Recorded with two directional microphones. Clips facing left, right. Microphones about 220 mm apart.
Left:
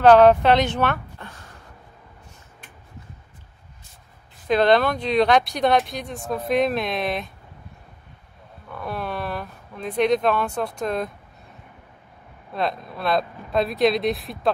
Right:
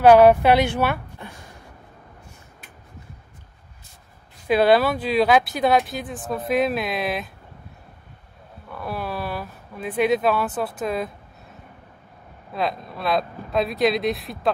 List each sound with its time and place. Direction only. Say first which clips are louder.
0.0 s speech: right 1 dB; 10° right (ahead or behind)
4.5 s speech: right 1 dB; 5° right (ahead or behind)
8.6 s speech: even; 5° right (ahead or behind)
12.5 s speech: even; centre (ahead or behind)